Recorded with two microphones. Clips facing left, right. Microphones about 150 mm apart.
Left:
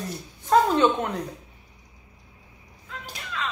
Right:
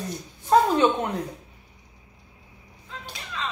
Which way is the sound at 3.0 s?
25° right (ahead or behind).